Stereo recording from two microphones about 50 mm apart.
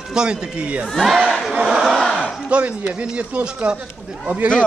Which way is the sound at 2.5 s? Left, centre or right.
Right.